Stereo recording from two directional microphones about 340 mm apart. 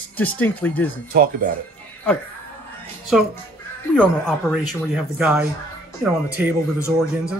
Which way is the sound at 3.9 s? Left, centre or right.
Centre.